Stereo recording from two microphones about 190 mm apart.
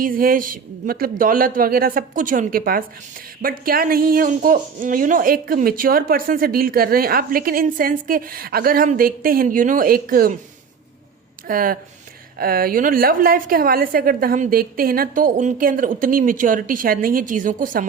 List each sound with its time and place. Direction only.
0.0 s speech: 50° right (ahead or behind)
11.4 s speech: 50° right (ahead or behind)